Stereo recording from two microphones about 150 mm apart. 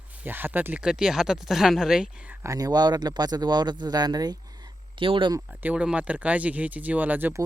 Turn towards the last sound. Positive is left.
turn(degrees=-10)  # may be behind; listen again after turning